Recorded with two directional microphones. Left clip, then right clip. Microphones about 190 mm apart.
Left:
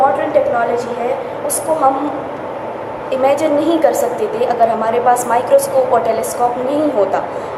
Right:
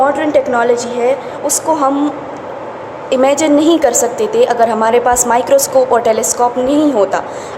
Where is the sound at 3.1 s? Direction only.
55° right (ahead or behind).